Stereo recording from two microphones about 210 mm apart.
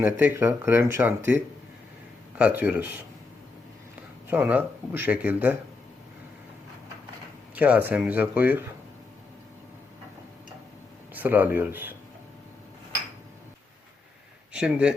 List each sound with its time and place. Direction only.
0.0 s speech: 10° right (ahead or behind)
2.4 s speech: 5° right (ahead or behind)
4.3 s speech: 10° right (ahead or behind)
7.5 s speech: 5° right (ahead or behind)
11.1 s speech: 10° right (ahead or behind)
14.5 s speech: 5° right (ahead or behind)